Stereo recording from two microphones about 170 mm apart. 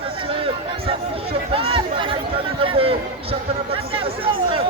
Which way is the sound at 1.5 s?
35° right (ahead or behind).